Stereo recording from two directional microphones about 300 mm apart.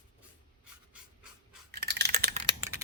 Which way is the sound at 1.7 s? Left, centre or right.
Right.